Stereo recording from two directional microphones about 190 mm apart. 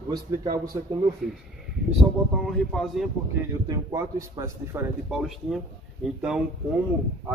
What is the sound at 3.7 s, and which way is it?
Speech, 20° right (ahead or behind).